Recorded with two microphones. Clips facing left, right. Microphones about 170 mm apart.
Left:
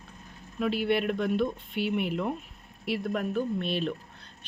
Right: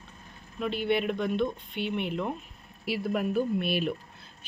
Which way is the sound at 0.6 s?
Centre (ahead or behind).